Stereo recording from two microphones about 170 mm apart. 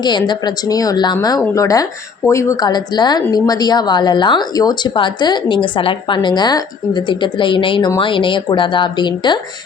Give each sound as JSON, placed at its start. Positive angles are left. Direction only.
{"t": 0.0, "sound": "speech", "side_deg": 25}